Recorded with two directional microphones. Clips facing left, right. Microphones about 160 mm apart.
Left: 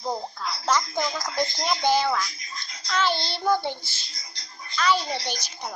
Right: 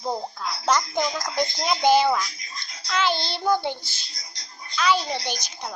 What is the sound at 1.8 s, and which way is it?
Speech, 15° right (ahead or behind).